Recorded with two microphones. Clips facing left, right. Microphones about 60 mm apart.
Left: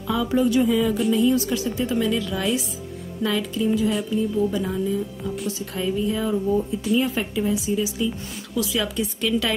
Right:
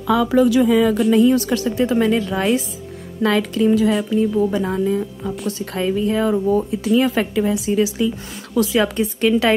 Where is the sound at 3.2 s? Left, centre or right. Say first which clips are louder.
Right 6 dB; right.